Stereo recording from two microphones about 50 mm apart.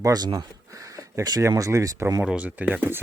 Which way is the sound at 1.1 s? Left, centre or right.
Right.